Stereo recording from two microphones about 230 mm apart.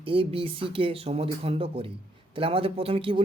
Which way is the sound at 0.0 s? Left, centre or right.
Right.